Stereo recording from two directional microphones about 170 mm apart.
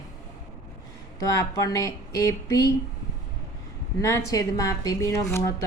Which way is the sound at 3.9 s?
20° left (ahead or behind).